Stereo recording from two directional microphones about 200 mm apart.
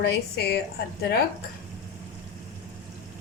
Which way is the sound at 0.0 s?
55° left (ahead or behind).